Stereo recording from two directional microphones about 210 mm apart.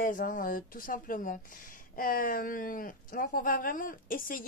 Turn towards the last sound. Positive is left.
turn(degrees=40)  # may be behind; listen again after turning